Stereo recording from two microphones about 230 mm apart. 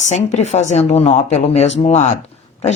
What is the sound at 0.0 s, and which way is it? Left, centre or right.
Speech, left.